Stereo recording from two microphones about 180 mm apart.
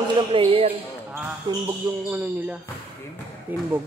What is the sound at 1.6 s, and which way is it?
Speech, 10° right (ahead or behind).